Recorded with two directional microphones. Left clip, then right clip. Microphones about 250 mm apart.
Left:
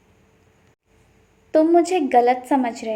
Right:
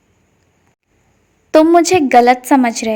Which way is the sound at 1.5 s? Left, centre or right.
Right.